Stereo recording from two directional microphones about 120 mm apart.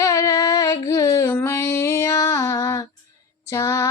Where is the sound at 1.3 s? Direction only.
20° left (ahead or behind).